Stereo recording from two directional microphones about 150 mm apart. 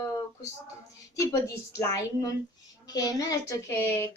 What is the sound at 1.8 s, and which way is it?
Speech, 25° left (ahead or behind).